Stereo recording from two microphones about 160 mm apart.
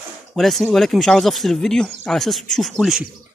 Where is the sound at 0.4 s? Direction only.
Centre (ahead or behind).